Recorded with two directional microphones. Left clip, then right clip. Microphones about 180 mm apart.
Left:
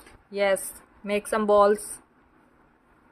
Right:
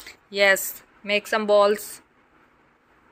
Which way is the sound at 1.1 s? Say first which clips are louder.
Right 2 dB; 15° left (ahead or behind).